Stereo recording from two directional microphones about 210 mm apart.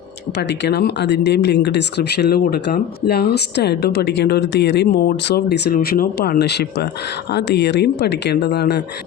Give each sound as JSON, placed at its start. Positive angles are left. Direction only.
{"t": 0.3, "sound": "speech", "side_deg": 55}